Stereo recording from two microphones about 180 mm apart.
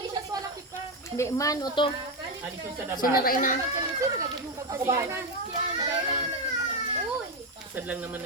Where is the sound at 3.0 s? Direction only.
55° left (ahead or behind).